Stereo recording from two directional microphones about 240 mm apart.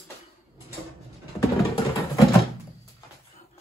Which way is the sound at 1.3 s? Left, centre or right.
Centre.